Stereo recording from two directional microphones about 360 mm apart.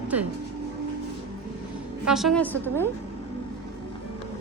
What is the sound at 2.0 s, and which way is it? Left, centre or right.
Speech, centre.